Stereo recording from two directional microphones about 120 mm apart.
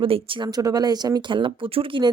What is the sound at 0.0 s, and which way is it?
Speech, 45° right (ahead or behind).